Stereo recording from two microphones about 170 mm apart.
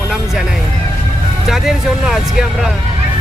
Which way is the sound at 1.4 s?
Centre (ahead or behind).